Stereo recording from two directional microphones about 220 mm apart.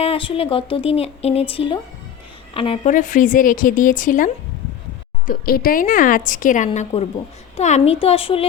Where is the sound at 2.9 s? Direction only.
35° left (ahead or behind).